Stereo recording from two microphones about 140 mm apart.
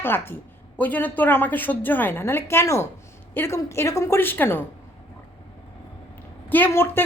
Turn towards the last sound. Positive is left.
turn(degrees=15)  # may be behind; listen again after turning